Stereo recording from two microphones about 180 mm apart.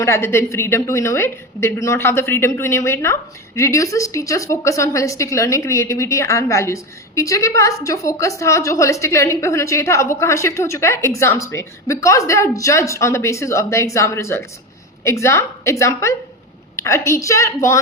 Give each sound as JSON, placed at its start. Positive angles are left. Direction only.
{"t": 0.0, "sound": "a woman's voice", "side_deg": 15}